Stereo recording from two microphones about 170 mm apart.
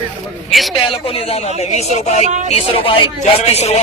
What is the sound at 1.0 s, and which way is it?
A man's voice, 35° left (ahead or behind).